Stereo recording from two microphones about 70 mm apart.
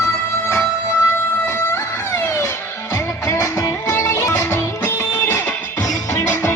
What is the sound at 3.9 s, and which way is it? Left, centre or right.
Music, left.